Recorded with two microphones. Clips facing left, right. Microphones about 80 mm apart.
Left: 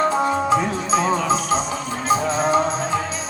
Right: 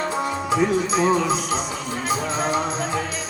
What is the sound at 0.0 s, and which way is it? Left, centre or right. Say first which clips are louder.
Music: left 6 dB; left.